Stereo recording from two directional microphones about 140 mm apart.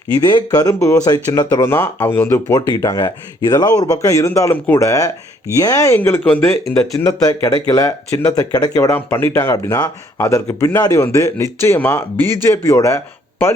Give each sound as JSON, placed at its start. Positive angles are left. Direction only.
{"t": 0.2, "sound": "speech", "side_deg": 30}
{"t": 6.0, "sound": "speech", "side_deg": 10}
{"t": 7.0, "sound": "speech", "side_deg": 25}
{"t": 8.9, "sound": "speech", "side_deg": 15}